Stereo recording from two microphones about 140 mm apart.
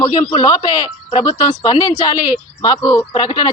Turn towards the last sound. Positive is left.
turn(degrees=30)  # may be behind; listen again after turning